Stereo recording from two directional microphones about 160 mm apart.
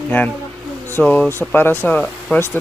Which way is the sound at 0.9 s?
5° left (ahead or behind).